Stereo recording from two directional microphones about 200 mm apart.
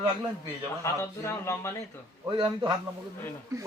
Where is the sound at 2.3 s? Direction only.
20° right (ahead or behind).